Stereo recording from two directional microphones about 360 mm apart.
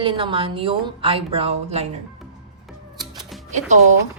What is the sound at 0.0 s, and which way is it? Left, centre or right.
Speech, centre.